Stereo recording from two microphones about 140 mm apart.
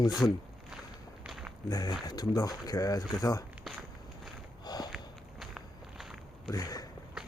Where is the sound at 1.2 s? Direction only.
5° right (ahead or behind).